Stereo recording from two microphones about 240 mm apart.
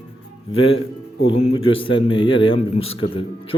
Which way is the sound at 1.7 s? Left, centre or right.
Left.